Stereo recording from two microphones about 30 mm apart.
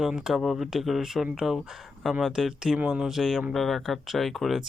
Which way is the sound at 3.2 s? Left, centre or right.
Centre.